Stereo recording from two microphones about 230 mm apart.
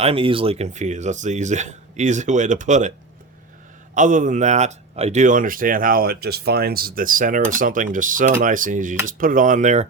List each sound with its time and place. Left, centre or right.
0.0 s speech: right
3.9 s speech: right